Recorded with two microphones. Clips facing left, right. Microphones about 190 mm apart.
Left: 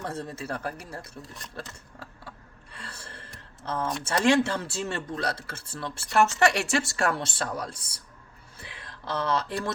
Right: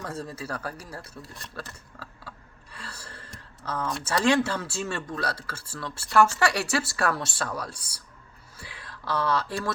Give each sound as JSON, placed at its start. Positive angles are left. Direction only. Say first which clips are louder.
{"t": 0.0, "sound": "speech", "louder": "left 1 dB", "side_deg": 25}
{"t": 2.7, "sound": "gasp", "louder": "right 1 dB", "side_deg": 25}
{"t": 4.2, "sound": "speech", "louder": "left 1 dB", "side_deg": 25}